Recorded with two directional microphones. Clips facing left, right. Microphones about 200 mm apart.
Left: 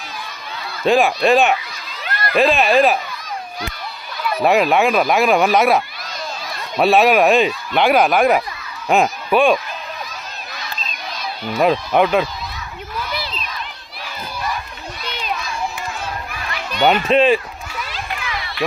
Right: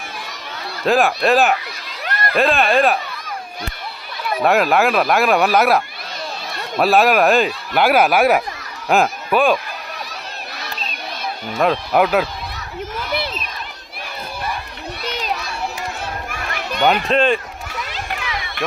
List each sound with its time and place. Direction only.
0.8 s speech: centre (ahead or behind)
4.4 s speech: centre (ahead or behind)
6.8 s speech: centre (ahead or behind)
11.5 s speech: centre (ahead or behind)
13.1 s a sound: 55° right (ahead or behind)
15.0 s children playing: 40° right (ahead or behind)
16.3 s children playing: 50° right (ahead or behind)
16.8 s speech: centre (ahead or behind)